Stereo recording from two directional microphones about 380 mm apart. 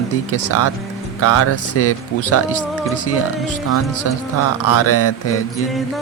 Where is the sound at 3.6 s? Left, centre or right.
Left.